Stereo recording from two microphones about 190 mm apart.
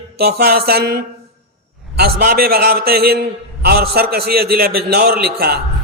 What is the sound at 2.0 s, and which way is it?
A man's voice, 50° right (ahead or behind).